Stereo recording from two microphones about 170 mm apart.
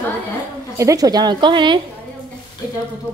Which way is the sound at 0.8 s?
20° right (ahead or behind).